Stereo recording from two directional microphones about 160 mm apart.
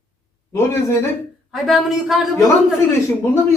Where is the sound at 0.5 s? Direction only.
15° left (ahead or behind).